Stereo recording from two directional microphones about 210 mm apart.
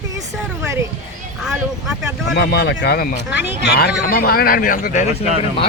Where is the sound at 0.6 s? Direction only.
15° right (ahead or behind).